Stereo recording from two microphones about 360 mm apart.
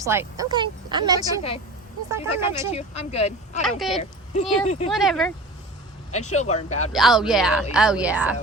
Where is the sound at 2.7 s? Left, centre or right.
Centre.